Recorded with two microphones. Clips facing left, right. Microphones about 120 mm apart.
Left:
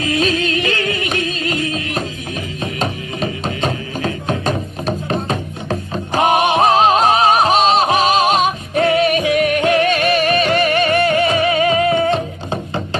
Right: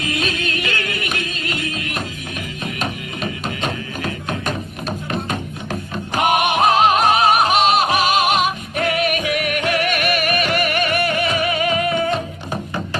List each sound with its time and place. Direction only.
0.0 s music: 30° left (ahead or behind)